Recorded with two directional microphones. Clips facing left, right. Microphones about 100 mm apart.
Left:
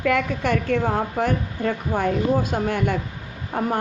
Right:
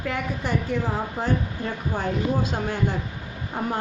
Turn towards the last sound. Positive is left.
turn(degrees=55)  # may be behind; listen again after turning